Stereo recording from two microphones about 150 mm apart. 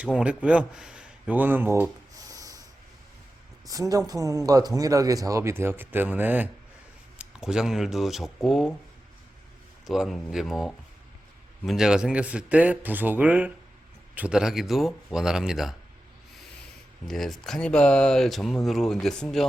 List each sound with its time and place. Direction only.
0.0 s speech: 5° right (ahead or behind); by 2.6 s 25° right (ahead or behind)
3.7 s speech: 25° right (ahead or behind); by 8.7 s centre (ahead or behind)
9.8 s speech: centre (ahead or behind)
17.1 s speech: centre (ahead or behind)